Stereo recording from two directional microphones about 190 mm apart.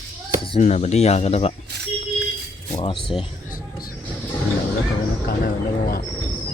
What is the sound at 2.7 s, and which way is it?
Speech, 30° left (ahead or behind).